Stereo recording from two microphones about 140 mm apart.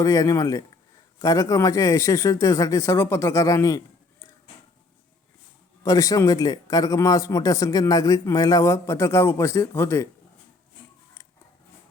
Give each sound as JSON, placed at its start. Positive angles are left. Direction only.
{"t": 0.0, "sound": "a man's voice", "side_deg": 25}
{"t": 5.8, "sound": "a man's voice", "side_deg": 25}